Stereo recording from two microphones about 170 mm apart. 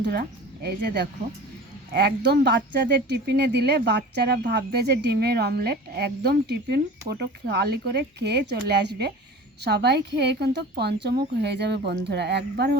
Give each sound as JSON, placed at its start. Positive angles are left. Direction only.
{"t": 0.0, "sound": "a woman's voice", "side_deg": -70}